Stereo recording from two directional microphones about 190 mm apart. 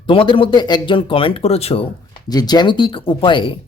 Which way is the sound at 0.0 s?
25° left (ahead or behind).